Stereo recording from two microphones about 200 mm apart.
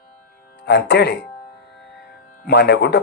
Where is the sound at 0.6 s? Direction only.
60° left (ahead or behind).